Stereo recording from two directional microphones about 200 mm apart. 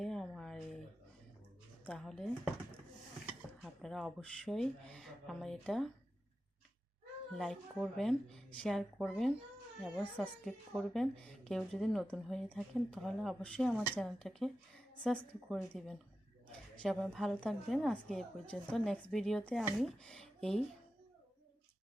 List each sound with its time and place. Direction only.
0.0 s a sound: centre (ahead or behind)
1.8 s speech: 5° left (ahead or behind)
3.6 s speech: centre (ahead or behind)
7.3 s speech: centre (ahead or behind)